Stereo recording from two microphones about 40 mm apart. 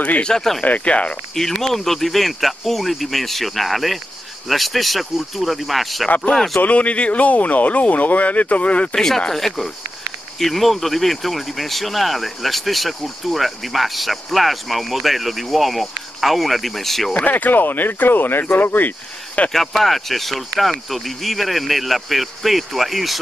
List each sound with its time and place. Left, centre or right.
0.3 s speech: centre
0.6 s speech: left
1.6 s speech: centre
6.0 s speech: left
8.9 s speech: centre
17.1 s speech: left
19.5 s speech: centre